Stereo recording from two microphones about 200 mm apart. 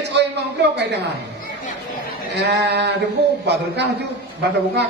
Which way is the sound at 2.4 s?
60° right (ahead or behind).